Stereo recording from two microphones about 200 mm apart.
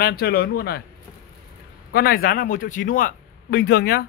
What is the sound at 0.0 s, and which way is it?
Speech, 50° left (ahead or behind).